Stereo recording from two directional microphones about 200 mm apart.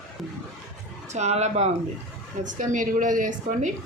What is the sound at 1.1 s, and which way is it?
A woman's voice, 35° right (ahead or behind).